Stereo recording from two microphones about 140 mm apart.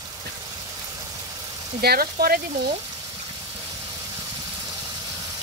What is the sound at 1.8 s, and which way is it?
Speech, 90° right.